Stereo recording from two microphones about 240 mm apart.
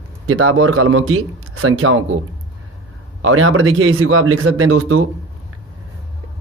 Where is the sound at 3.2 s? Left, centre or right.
Right.